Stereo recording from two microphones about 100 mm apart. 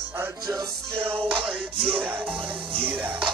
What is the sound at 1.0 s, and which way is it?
Music, 65° right (ahead or behind).